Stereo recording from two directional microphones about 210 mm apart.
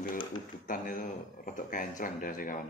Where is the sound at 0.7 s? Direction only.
40° left (ahead or behind).